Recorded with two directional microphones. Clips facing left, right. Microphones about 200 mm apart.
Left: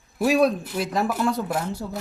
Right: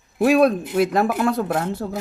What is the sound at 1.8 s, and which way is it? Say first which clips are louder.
Speech: right 4 dB; 70° right (ahead or behind).